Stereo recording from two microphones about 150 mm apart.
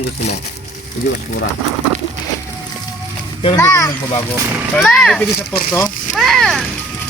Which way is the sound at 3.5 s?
20° left (ahead or behind).